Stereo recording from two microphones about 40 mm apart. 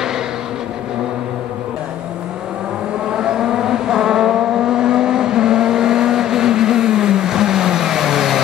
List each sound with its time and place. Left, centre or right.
3.1 s vehicle: centre